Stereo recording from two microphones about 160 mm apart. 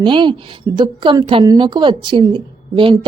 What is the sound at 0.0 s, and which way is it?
A woman's voice, 30° right (ahead or behind).